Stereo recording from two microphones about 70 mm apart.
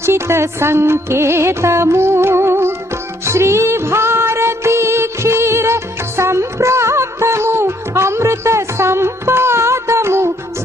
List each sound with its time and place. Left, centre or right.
0.0 s music: right